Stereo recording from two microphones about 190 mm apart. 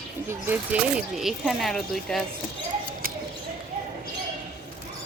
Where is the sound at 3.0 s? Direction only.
50° right (ahead or behind).